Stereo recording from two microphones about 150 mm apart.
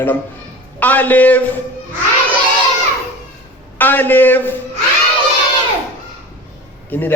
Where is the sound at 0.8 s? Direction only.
10° left (ahead or behind).